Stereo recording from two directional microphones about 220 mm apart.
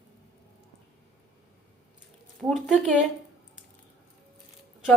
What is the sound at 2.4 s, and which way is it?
Speech, centre (ahead or behind).